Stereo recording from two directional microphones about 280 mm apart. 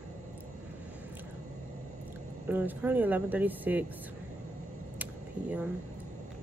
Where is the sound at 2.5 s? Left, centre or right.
Centre.